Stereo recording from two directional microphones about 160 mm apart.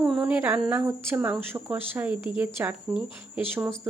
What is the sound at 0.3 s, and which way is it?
Speech, 10° right (ahead or behind).